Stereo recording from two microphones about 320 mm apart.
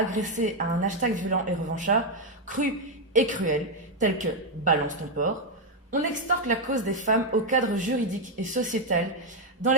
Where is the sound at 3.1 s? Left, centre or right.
Right.